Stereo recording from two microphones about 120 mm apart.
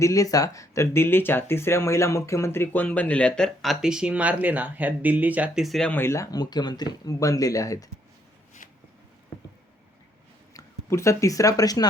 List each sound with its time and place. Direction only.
0.0 s speech: 30° left (ahead or behind); by 5.6 s 10° right (ahead or behind)
5.6 s speech: centre (ahead or behind)
5.9 s speech: 20° left (ahead or behind)
10.5 s speech: 25° left (ahead or behind)